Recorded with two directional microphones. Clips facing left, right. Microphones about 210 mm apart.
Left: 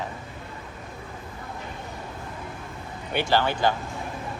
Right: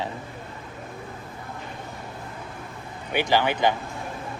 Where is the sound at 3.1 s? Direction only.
15° right (ahead or behind).